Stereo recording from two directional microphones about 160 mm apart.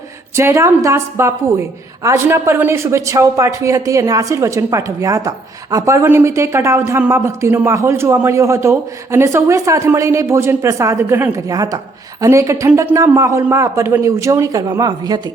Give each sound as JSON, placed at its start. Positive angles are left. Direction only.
{"t": 0.3, "sound": "a man's voice", "side_deg": -15}